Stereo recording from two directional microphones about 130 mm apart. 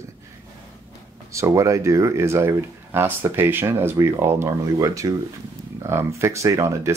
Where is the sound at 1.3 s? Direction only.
25° right (ahead or behind).